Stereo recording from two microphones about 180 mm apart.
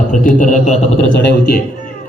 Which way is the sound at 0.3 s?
45° left (ahead or behind).